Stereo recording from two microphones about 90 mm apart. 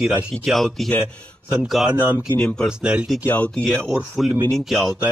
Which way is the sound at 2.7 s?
10° right (ahead or behind).